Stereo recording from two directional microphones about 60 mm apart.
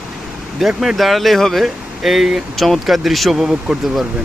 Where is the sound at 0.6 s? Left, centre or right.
Centre.